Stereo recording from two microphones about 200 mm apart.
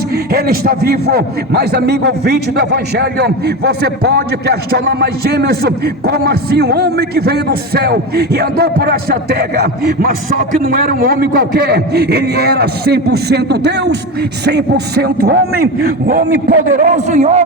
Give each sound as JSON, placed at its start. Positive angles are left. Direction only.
{"t": 0.3, "sound": "a man's voice", "side_deg": -50}